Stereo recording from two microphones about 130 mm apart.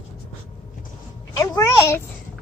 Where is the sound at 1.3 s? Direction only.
25° left (ahead or behind).